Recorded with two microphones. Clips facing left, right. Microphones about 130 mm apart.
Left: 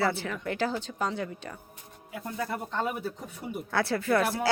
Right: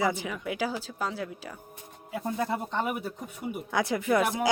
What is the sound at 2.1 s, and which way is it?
A man's voice, 20° right (ahead or behind).